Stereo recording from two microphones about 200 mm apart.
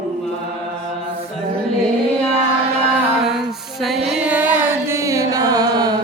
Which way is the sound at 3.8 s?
Centre (ahead or behind).